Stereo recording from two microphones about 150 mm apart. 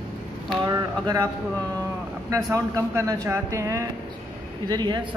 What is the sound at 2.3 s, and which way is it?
Speech, 20° right (ahead or behind).